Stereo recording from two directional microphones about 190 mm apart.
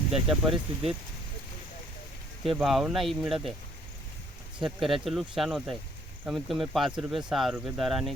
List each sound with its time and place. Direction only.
0.1 s speech: 5° right (ahead or behind)
0.5 s speech: 30° right (ahead or behind)
2.6 s speech: centre (ahead or behind)
4.6 s speech: centre (ahead or behind)